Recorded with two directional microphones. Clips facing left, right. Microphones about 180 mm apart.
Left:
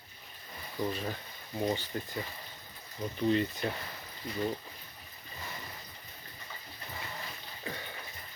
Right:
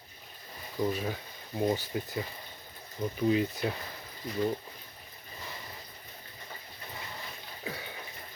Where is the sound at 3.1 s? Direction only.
5° right (ahead or behind).